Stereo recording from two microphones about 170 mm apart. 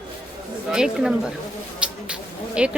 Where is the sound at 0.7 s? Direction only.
5° right (ahead or behind).